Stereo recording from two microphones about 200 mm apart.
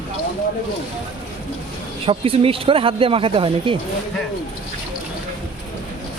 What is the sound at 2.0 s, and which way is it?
Speech, 30° right (ahead or behind).